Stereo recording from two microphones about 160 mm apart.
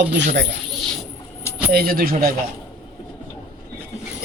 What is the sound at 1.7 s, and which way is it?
Speech, 70° right (ahead or behind).